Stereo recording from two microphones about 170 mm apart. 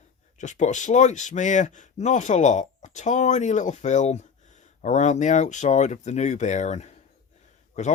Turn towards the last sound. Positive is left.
turn(degrees=45)  # may be behind; listen again after turning